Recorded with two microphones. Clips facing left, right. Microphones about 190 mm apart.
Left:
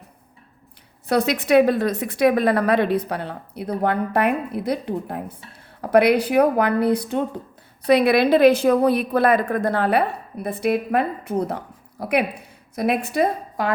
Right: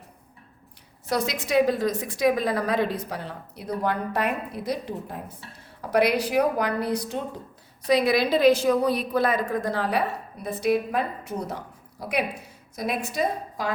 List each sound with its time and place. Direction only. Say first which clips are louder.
1.0 s a woman's voice: left 7 dB; 60° left (ahead or behind)